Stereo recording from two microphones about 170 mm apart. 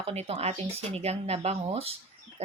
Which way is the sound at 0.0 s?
35° right (ahead or behind).